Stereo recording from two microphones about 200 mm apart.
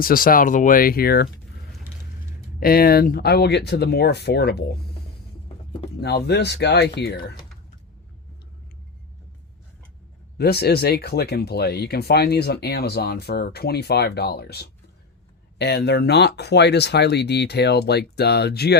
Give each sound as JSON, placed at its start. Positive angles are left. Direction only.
{"t": 0.0, "sound": "speech", "side_deg": 45}
{"t": 2.6, "sound": "speech", "side_deg": 50}
{"t": 6.0, "sound": "speech", "side_deg": 55}
{"t": 10.3, "sound": "speech", "side_deg": 50}